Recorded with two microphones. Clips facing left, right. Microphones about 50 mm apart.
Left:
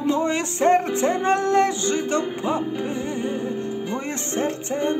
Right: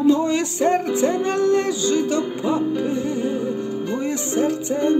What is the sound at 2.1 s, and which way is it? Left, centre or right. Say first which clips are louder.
Music: right 2 dB; left.